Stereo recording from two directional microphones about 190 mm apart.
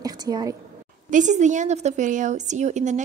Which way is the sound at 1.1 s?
40° right (ahead or behind).